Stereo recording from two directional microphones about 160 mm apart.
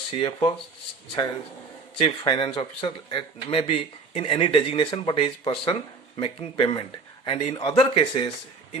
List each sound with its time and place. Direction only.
0.1 s speech: 35° left (ahead or behind)
2.0 s speech: 35° left (ahead or behind)
7.3 s speech: 45° left (ahead or behind)
7.5 s speech: 30° left (ahead or behind)